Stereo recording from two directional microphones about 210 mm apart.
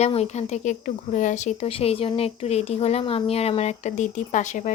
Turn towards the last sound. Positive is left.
turn(degrees=35)  # may be behind; listen again after turning